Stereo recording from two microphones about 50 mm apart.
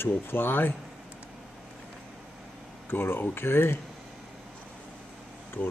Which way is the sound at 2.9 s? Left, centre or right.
Left.